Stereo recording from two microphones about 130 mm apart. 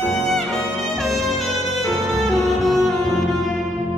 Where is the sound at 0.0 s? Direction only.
Centre (ahead or behind).